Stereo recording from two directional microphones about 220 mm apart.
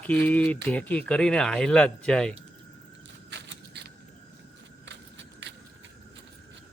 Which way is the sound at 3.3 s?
50° right (ahead or behind).